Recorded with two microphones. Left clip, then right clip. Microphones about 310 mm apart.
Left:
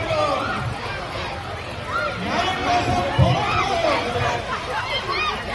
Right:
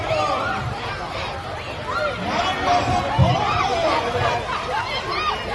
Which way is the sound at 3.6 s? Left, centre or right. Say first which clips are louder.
Even; centre.